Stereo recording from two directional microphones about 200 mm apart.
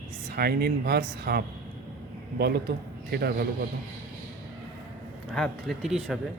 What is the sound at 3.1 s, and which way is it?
Speech, 50° right (ahead or behind).